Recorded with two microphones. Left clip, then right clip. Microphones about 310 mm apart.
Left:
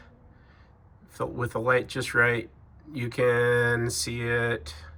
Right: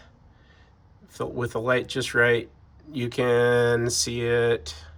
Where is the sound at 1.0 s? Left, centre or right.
Centre.